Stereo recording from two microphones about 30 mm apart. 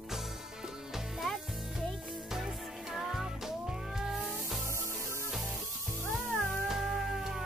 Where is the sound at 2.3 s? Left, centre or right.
Centre.